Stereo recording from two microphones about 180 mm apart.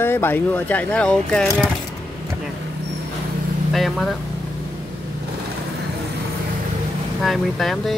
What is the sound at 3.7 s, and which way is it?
Speech, centre (ahead or behind).